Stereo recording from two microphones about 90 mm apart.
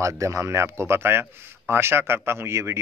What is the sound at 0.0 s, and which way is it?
A man's voice, 35° right (ahead or behind).